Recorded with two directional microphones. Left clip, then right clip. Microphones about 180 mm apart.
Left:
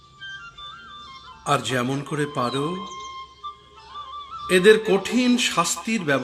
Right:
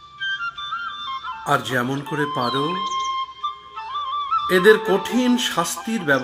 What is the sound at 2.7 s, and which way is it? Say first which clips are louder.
Music: right 10 dB; 45° right (ahead or behind).